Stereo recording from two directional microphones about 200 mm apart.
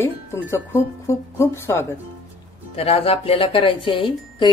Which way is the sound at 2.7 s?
30° left (ahead or behind).